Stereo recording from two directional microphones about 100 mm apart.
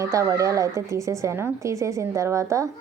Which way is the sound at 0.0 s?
30° right (ahead or behind).